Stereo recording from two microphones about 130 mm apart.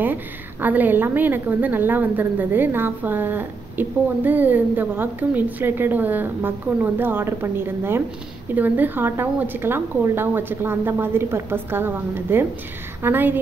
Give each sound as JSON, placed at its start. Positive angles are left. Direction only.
{"t": 0.0, "sound": "a woman's voice", "side_deg": -15}